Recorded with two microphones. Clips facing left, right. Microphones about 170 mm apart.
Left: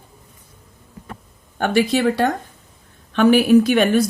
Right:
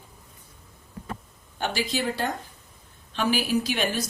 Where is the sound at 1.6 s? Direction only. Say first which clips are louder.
Left 10 dB; 60° left (ahead or behind).